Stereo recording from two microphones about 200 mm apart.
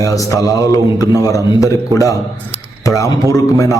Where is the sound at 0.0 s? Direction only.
15° left (ahead or behind).